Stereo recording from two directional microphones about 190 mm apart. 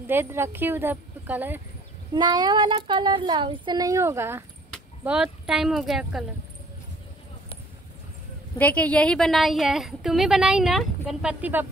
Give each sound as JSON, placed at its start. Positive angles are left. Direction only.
{"t": 0.0, "sound": "speech", "side_deg": -10}
{"t": 2.1, "sound": "a woman's voice", "side_deg": -25}
{"t": 8.5, "sound": "a woman's voice", "side_deg": 10}